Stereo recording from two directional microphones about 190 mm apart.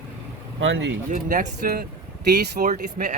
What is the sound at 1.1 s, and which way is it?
Speech, 45° right (ahead or behind).